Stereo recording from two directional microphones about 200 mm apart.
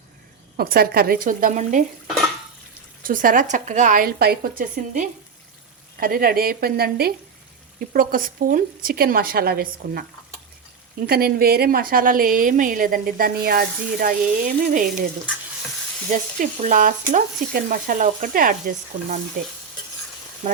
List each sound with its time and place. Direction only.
0.5 s a woman's voice: 50° right (ahead or behind)
3.0 s a woman's voice: 40° right (ahead or behind)
11.0 s a woman's voice: 50° right (ahead or behind)
16.1 s a woman's voice: 40° right (ahead or behind)